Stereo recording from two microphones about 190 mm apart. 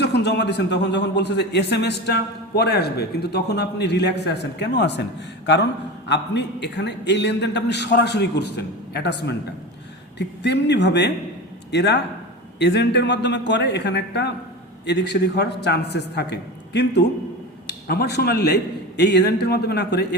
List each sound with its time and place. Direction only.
0.0 s a man's voice: 65° left (ahead or behind)
6.1 s a man's voice: 65° left (ahead or behind)